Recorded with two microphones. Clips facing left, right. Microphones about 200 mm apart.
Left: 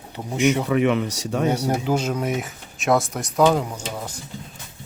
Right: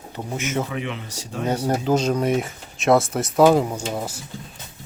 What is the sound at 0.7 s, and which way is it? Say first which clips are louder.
Speech: left 10 dB; 70° left (ahead or behind).